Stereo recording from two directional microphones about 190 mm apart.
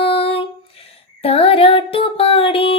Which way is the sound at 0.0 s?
30° left (ahead or behind).